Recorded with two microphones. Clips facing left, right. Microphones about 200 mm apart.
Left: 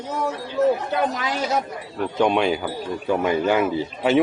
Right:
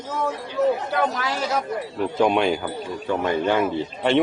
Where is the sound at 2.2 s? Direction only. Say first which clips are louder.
Even; centre (ahead or behind).